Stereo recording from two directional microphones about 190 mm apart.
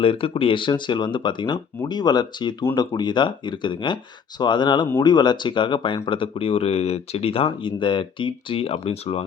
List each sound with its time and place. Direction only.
0.0 s speech: 30° left (ahead or behind)